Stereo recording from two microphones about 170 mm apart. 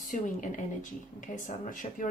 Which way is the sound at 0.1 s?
50° left (ahead or behind).